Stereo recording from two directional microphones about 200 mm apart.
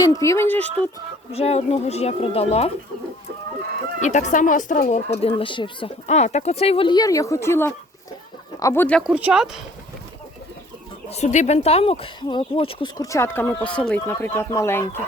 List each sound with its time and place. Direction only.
0.0 s speech: 15° left (ahead or behind)
1.3 s speech: 30° left (ahead or behind)
4.0 s speech: 35° left (ahead or behind); by 9.6 s 5° right (ahead or behind)
11.1 s speech: 35° left (ahead or behind); by 15.0 s 10° left (ahead or behind)